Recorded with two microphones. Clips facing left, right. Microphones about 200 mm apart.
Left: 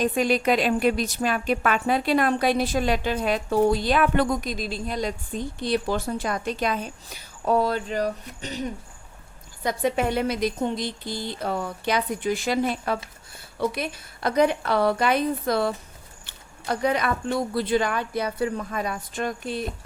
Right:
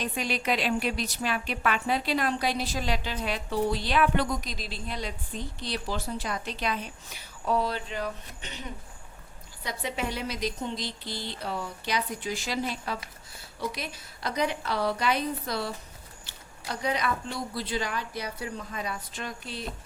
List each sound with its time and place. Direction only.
0.0 s speech: 45° left (ahead or behind)
9.6 s speech: 50° left (ahead or behind)